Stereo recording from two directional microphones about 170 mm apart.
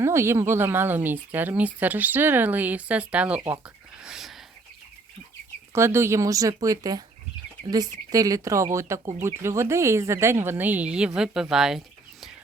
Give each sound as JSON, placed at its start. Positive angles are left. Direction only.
{"t": 0.0, "sound": "speech", "side_deg": -15}
{"t": 4.0, "sound": "bird", "side_deg": 0}
{"t": 5.7, "sound": "speech", "side_deg": -15}